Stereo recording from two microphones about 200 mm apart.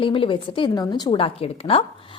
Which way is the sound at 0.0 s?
25° left (ahead or behind).